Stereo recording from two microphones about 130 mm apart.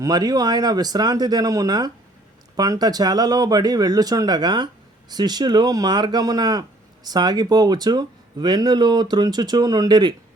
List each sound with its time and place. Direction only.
0.0 s speech: 30° right (ahead or behind)